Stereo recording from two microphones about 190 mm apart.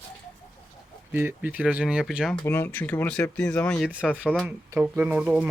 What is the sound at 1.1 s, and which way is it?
Speech, 10° right (ahead or behind).